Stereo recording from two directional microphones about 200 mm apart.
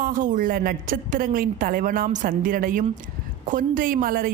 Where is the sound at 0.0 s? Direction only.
40° right (ahead or behind).